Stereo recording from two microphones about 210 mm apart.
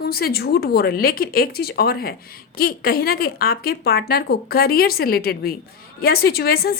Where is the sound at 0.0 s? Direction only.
45° left (ahead or behind).